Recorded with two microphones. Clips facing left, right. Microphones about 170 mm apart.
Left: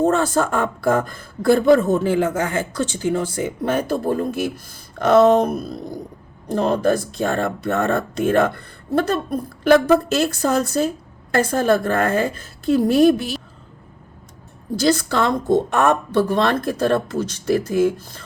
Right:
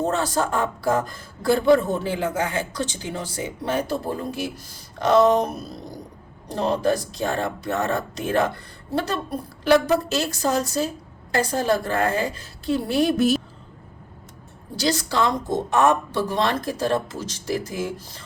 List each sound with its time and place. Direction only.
0.0 s speech: 50° left (ahead or behind)
13.1 s a woman's voice: 45° right (ahead or behind)
14.8 s speech: 50° left (ahead or behind)